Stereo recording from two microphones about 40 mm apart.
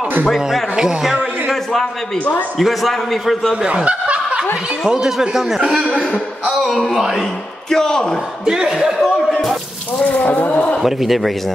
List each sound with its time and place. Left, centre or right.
0.7 s speech: centre
1.5 s a man's voice: centre
3.6 s speech: right
4.8 s speech: centre
5.6 s a man's voice: right
5.9 s a man's voice: left
6.9 s speech: centre
7.7 s speech: centre
8.5 s speech: centre
9.0 s a man's voice: centre
10.0 s speech: left
10.8 s a man's voice: centre